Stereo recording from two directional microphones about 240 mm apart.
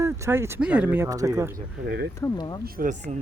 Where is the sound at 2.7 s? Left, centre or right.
Right.